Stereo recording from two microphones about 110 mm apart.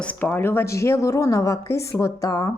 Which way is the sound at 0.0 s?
15° left (ahead or behind).